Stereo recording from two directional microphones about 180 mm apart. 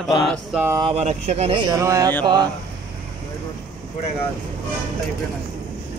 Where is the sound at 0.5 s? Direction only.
10° right (ahead or behind).